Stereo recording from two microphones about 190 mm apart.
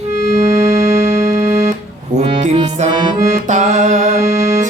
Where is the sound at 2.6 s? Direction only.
25° right (ahead or behind).